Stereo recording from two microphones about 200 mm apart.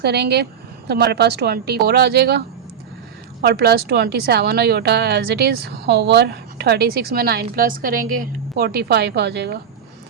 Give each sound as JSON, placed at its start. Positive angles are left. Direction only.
{"t": 0.0, "sound": "a woman's voice", "side_deg": -55}
{"t": 3.4, "sound": "speech", "side_deg": -55}